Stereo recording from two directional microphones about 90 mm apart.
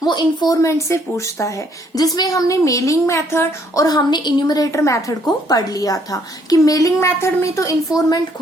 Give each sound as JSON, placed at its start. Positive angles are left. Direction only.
{"t": 0.0, "sound": "speech", "side_deg": 55}
{"t": 3.8, "sound": "a woman's voice", "side_deg": 50}